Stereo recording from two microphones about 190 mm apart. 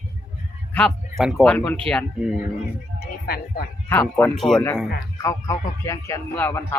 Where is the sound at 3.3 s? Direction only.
55° left (ahead or behind).